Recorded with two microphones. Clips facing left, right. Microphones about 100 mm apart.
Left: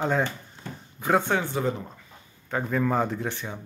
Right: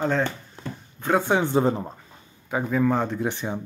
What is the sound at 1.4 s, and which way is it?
Speech, 30° right (ahead or behind).